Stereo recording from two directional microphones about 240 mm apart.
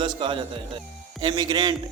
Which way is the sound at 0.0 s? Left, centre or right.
Right.